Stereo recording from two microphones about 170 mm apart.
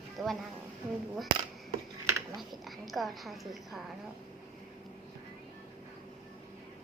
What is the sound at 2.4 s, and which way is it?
A woman's voice, centre (ahead or behind).